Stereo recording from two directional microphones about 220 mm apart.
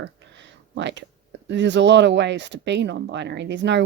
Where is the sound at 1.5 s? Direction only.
55° right (ahead or behind).